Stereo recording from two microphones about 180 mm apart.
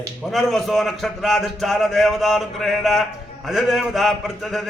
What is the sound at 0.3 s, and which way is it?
A man's voice, centre (ahead or behind).